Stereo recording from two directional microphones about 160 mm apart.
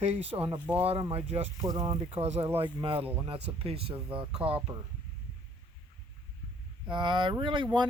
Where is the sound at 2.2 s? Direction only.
40° right (ahead or behind).